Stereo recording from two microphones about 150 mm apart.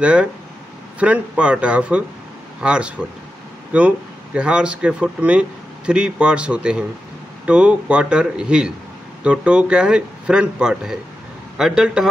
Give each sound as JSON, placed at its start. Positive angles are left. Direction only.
{"t": 0.0, "sound": "a man's voice", "side_deg": -10}